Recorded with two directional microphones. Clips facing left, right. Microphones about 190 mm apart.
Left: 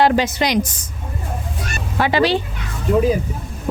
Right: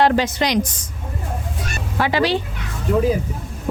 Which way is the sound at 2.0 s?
20° left (ahead or behind).